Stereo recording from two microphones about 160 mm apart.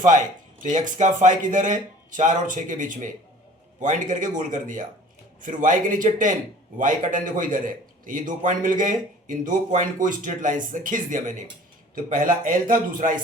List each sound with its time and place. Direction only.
0.6 s a man's voice: 50° right (ahead or behind)